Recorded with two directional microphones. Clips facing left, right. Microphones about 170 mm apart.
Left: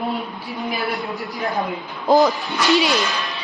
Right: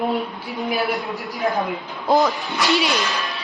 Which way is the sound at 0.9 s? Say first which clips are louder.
Even; centre (ahead or behind).